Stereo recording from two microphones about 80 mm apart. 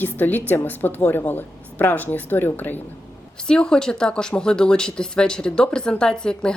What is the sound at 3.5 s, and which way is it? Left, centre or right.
Speech, centre.